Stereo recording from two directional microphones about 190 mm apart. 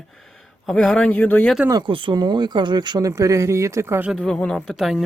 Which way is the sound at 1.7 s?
25° right (ahead or behind).